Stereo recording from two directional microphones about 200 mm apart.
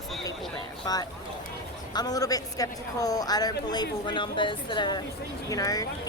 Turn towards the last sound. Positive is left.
turn(degrees=20)  # may be behind; listen again after turning